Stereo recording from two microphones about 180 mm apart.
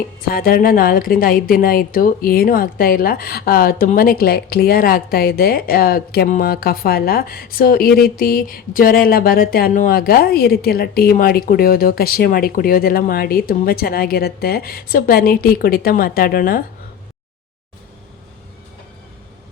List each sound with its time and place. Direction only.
0.3 s a woman's voice: 55° left (ahead or behind)